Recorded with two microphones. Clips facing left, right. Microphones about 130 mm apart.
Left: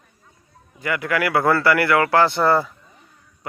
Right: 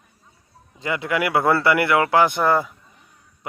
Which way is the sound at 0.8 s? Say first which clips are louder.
Left 1 dB; 20° right (ahead or behind).